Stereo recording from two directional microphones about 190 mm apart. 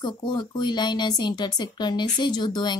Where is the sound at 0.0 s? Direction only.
25° left (ahead or behind).